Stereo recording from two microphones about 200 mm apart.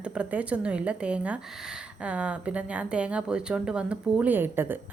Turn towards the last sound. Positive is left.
turn(degrees=-10)  # may be behind; listen again after turning